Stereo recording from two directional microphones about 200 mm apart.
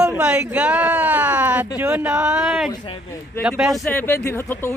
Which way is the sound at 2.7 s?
20° left (ahead or behind).